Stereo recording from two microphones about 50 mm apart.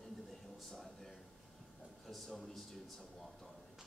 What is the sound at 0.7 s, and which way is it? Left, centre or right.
A man's voice, centre.